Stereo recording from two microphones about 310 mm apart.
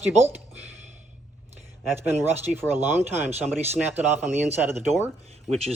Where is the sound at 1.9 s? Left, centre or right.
Centre.